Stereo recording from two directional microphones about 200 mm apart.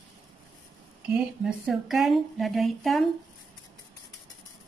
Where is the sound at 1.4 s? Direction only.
Centre (ahead or behind).